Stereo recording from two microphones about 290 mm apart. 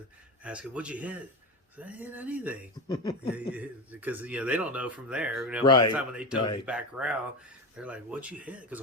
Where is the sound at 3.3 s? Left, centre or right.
Centre.